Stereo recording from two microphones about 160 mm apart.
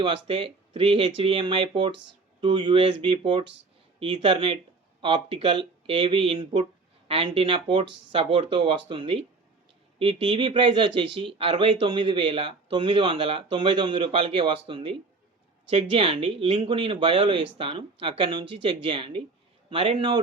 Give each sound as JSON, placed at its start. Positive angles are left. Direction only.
{"t": 0.0, "sound": "speech", "side_deg": -35}